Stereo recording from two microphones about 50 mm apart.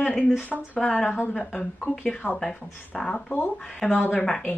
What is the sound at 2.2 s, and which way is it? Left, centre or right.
Speech, left.